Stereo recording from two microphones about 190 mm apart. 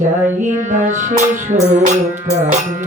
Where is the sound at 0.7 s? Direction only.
40° right (ahead or behind).